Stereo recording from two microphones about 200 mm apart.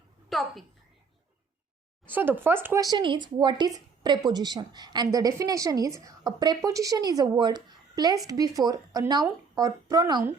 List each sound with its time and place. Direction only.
0.3 s a woman's voice: centre (ahead or behind)
2.0 s a woman's voice: 10° right (ahead or behind)